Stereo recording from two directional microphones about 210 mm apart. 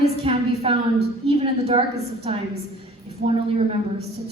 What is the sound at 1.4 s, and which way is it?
Speech, 30° right (ahead or behind).